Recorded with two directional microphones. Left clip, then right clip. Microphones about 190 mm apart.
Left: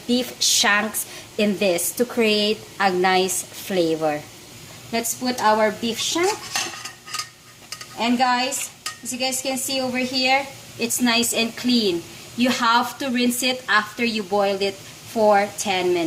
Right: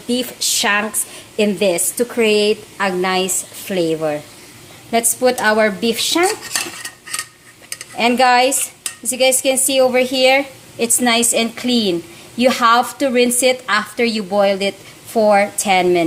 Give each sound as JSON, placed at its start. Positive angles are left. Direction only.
{"t": 0.1, "sound": "a woman's voice", "side_deg": -10}
{"t": 4.9, "sound": "speech", "side_deg": -40}
{"t": 7.9, "sound": "a woman's voice", "side_deg": -45}